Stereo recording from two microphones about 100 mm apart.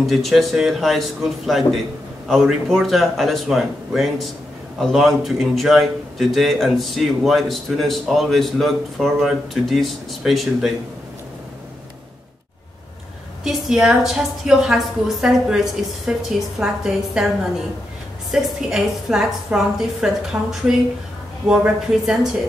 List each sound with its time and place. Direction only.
0.0 s a man's voice: centre (ahead or behind)
13.4 s a man's voice: 5° right (ahead or behind)
18.3 s a man's voice: 5° right (ahead or behind)
20.3 s speech: 25° right (ahead or behind)
21.5 s speech: 5° right (ahead or behind)